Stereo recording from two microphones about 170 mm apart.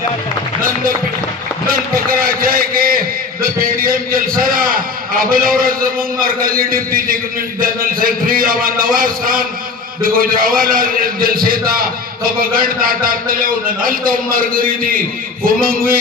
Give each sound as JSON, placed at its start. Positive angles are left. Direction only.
{"t": 1.6, "sound": "a man's voice", "side_deg": -60}